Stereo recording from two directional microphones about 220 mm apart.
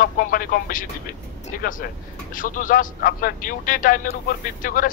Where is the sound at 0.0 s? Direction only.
40° left (ahead or behind).